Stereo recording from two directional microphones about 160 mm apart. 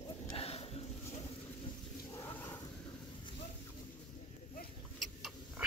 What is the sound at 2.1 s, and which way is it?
Cat, 15° left (ahead or behind).